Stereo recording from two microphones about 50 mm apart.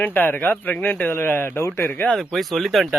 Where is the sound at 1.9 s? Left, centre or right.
Left.